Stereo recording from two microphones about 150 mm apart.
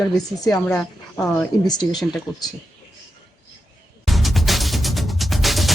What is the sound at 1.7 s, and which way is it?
Speech, 25° left (ahead or behind).